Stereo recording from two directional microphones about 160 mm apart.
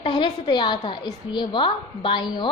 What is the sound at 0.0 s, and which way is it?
A woman's voice, 30° left (ahead or behind).